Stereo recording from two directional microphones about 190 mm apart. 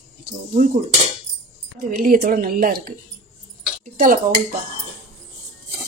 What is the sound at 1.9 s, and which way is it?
Speech, 50° right (ahead or behind).